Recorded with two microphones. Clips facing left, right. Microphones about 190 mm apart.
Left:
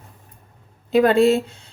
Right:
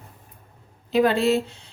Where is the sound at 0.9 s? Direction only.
50° left (ahead or behind).